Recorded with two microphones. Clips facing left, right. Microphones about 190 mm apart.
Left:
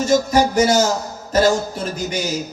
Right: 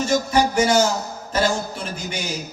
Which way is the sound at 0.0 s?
40° left (ahead or behind).